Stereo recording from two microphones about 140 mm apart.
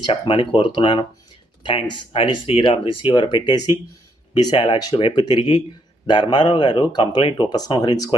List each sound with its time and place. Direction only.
0.0 s speech: 35° left (ahead or behind)